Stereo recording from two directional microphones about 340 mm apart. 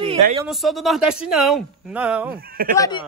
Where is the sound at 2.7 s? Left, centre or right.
Centre.